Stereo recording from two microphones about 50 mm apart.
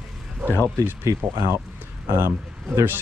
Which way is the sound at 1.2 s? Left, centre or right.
Right.